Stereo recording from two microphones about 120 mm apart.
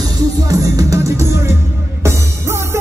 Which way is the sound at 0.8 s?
25° right (ahead or behind).